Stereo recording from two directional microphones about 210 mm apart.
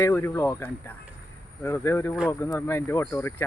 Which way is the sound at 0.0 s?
15° left (ahead or behind).